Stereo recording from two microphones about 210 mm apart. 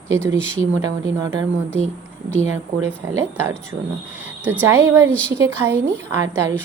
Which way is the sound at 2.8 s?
10° right (ahead or behind).